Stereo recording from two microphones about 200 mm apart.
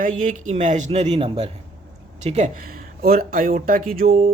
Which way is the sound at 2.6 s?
45° right (ahead or behind).